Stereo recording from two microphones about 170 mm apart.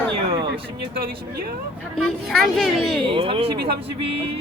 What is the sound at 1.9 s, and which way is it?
Speech, centre (ahead or behind).